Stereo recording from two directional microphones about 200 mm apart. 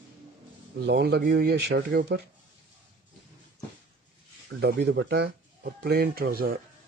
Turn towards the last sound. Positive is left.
turn(degrees=-50)  # may be behind; listen again after turning